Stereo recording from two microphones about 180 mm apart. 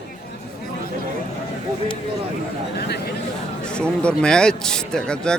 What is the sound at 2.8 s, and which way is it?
Speech, 60° left (ahead or behind).